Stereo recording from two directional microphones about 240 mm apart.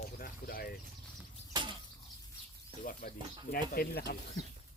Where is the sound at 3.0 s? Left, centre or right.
Left.